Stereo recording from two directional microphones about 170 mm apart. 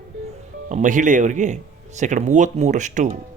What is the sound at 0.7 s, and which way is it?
Speech, 50° right (ahead or behind).